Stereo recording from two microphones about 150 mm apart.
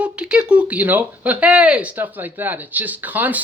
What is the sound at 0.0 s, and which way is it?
Speech, 5° right (ahead or behind).